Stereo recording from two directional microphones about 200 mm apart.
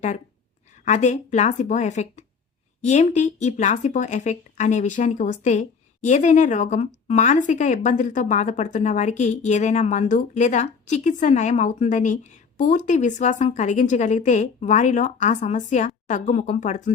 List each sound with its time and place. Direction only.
0.9 s speech: 35° left (ahead or behind)